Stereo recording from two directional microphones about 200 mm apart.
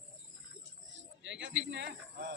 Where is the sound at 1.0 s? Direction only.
65° right (ahead or behind).